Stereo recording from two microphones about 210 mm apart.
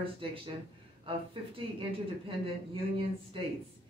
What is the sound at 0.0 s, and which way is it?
Speech, 25° right (ahead or behind).